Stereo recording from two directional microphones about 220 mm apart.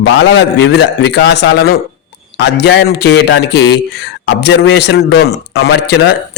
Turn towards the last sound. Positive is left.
turn(degrees=50)  # may be behind; listen again after turning